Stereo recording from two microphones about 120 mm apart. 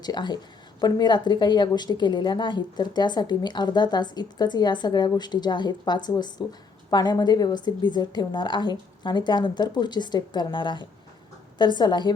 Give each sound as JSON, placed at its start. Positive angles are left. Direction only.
{"t": 0.0, "sound": "a woman's voice", "side_deg": 35}